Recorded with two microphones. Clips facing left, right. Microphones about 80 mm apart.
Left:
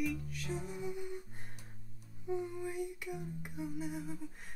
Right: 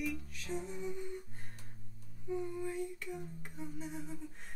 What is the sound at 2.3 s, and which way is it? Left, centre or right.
Humming, centre.